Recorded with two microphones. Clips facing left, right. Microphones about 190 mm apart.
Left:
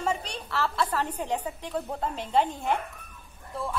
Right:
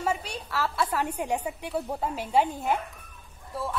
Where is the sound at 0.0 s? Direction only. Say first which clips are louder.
Even; 5° right (ahead or behind).